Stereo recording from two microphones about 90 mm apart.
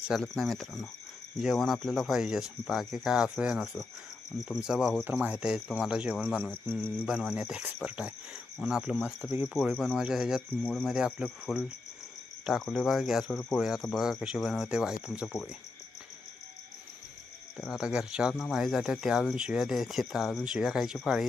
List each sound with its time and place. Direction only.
0.1 s speech: 5° right (ahead or behind)
5.0 s speech: 20° right (ahead or behind)
7.3 s speech: 10° right (ahead or behind)
10.6 s speech: 10° left (ahead or behind)
10.8 s speech: 5° right (ahead or behind)
17.6 s speech: 5° right (ahead or behind)